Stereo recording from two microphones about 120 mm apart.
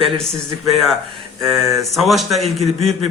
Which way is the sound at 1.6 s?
25° right (ahead or behind).